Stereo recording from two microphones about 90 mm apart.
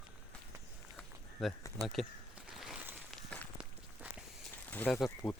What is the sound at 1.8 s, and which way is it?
Speech, 40° right (ahead or behind).